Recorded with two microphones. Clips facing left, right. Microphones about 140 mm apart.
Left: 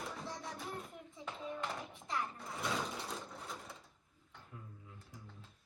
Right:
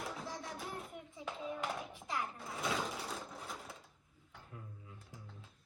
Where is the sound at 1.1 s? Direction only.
5° right (ahead or behind).